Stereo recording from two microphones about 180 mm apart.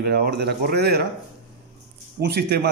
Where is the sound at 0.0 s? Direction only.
65° right (ahead or behind).